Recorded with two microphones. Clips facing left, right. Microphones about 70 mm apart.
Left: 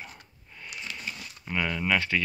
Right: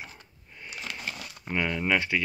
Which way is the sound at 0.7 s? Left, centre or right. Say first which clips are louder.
Right 2 dB; right.